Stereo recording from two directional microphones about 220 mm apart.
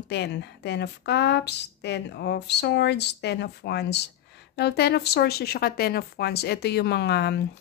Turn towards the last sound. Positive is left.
turn(degrees=50)  # may be behind; listen again after turning